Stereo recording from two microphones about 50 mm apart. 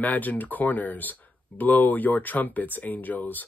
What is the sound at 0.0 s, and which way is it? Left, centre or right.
Speech, left.